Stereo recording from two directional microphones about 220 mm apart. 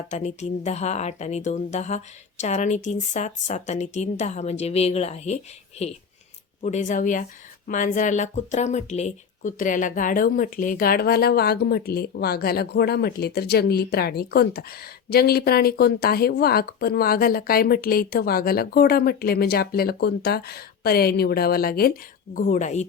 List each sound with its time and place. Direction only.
0.1 s a woman's voice: 30° left (ahead or behind)